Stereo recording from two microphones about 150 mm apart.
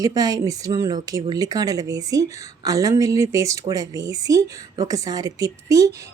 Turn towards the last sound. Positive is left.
turn(degrees=-25)  # may be behind; listen again after turning